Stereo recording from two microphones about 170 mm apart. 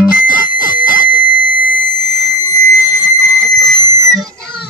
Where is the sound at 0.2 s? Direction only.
55° left (ahead or behind).